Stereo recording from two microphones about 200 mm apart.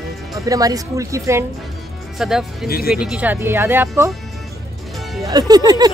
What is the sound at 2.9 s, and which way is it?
Speech, 5° right (ahead or behind).